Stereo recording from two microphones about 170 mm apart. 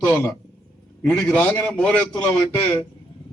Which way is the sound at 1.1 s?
5° left (ahead or behind).